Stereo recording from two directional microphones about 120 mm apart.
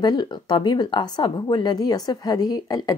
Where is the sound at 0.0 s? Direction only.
35° left (ahead or behind).